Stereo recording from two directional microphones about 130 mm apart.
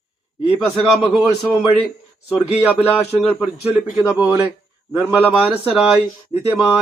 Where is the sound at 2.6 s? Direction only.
15° left (ahead or behind).